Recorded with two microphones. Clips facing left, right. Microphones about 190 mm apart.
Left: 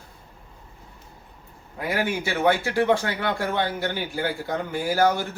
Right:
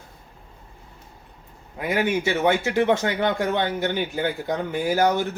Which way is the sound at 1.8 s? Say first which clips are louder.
Right 3 dB; 20° right (ahead or behind).